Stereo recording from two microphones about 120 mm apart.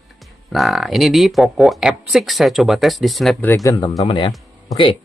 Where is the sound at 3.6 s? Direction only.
30° left (ahead or behind).